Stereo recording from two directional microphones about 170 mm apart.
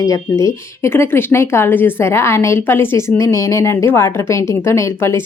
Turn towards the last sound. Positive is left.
turn(degrees=15)  # may be behind; listen again after turning